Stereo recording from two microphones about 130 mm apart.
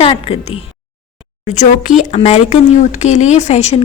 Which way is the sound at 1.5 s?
70° left (ahead or behind).